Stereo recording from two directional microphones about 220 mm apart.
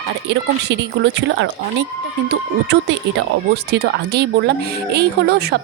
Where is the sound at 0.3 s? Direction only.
55° right (ahead or behind).